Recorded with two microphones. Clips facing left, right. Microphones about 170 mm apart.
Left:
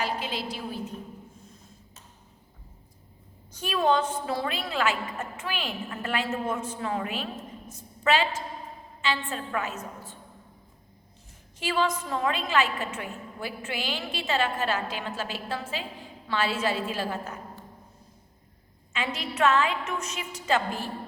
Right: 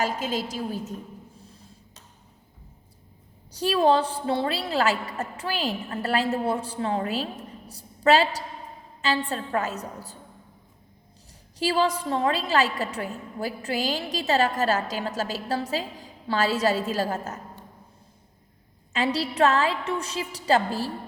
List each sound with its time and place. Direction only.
0.0 s a woman's voice: 45° right (ahead or behind)
3.5 s a woman's voice: 35° right (ahead or behind)
11.6 s a woman's voice: 35° right (ahead or behind)
18.9 s a woman's voice: 35° right (ahead or behind)